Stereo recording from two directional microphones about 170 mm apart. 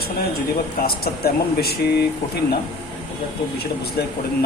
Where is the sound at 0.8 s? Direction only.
65° left (ahead or behind).